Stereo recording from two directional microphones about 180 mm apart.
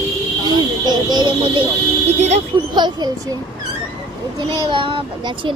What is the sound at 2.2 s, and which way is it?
Speech, 40° right (ahead or behind).